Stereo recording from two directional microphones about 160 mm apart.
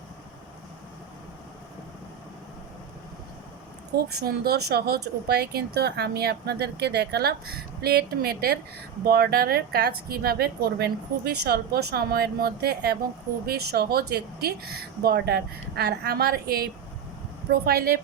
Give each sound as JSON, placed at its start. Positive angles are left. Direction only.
{"t": 3.9, "sound": "speech", "side_deg": -85}